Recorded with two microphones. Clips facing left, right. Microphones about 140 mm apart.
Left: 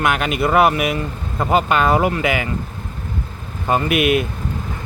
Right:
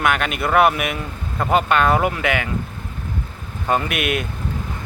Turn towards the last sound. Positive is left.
turn(degrees=0)  # may be behind; listen again after turning